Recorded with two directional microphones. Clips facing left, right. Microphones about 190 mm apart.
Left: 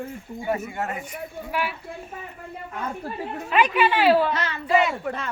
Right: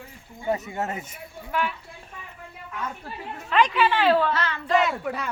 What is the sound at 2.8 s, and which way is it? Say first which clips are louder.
Speech: left 3 dB; 40° left (ahead or behind).